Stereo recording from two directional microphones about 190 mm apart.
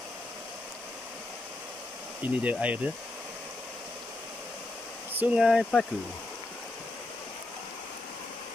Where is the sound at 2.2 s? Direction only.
10° right (ahead or behind).